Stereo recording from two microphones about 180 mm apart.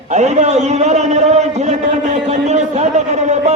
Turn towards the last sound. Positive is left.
turn(degrees=-40)  # may be behind; listen again after turning